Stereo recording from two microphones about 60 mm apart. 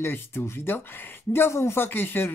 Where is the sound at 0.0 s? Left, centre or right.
Left.